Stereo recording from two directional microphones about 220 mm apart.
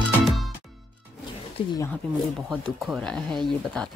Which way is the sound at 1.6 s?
25° left (ahead or behind).